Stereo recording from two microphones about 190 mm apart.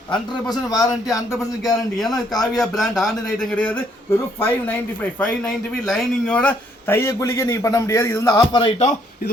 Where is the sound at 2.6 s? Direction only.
Centre (ahead or behind); by 8.9 s 25° left (ahead or behind).